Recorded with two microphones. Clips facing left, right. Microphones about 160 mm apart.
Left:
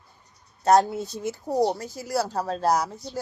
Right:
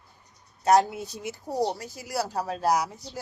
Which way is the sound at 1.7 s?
40° left (ahead or behind).